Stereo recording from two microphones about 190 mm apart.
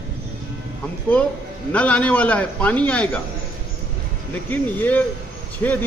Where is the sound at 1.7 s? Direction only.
5° left (ahead or behind).